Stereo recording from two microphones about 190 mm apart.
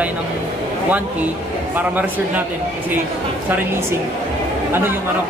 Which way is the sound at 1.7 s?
10° right (ahead or behind).